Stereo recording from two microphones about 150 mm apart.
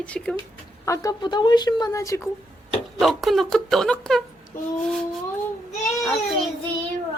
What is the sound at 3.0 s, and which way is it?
Speech, centre (ahead or behind).